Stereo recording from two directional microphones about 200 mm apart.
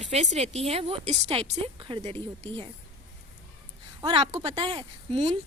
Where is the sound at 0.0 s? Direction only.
35° right (ahead or behind).